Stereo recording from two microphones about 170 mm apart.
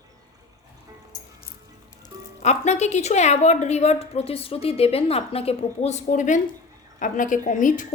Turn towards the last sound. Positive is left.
turn(degrees=50)  # may be behind; listen again after turning